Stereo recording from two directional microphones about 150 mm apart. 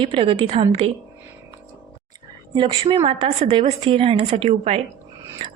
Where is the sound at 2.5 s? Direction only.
35° right (ahead or behind).